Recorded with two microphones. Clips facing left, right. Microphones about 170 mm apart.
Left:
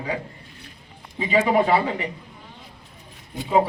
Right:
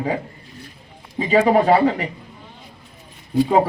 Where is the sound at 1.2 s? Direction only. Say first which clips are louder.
Right 4 dB; 40° right (ahead or behind).